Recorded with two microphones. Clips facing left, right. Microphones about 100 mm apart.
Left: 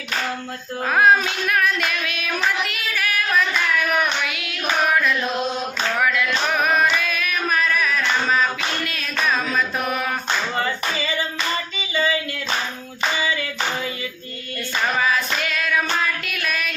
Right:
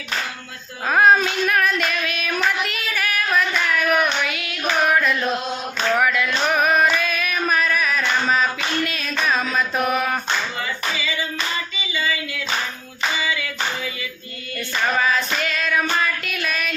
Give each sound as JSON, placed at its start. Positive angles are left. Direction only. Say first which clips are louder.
{"t": 0.9, "sound": "child singing", "louder": "right 1 dB", "side_deg": 0}
{"t": 6.0, "sound": "music", "louder": "left 2 dB", "side_deg": -5}
{"t": 8.9, "sound": "a sound", "louder": "right 1 dB", "side_deg": 0}
{"t": 10.6, "sound": "clapping", "louder": "left 2 dB", "side_deg": 45}
{"t": 14.9, "sound": "female singing", "louder": "right 1 dB", "side_deg": 5}